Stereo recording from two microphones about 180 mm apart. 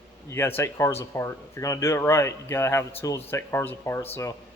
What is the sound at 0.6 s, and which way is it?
Speech, 15° left (ahead or behind).